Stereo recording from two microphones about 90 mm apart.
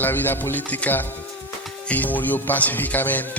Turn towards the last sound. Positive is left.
turn(degrees=20)  # may be behind; listen again after turning